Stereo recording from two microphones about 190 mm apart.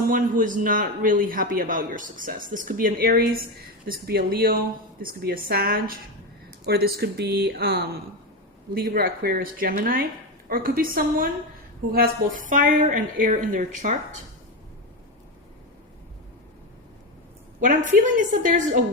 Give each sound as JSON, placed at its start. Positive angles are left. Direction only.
{"t": 0.1, "sound": "a man's voice", "side_deg": -45}
{"t": 17.6, "sound": "a woman's voice", "side_deg": -45}